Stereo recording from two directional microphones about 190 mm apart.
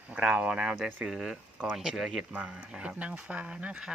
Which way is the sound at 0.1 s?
5° right (ahead or behind).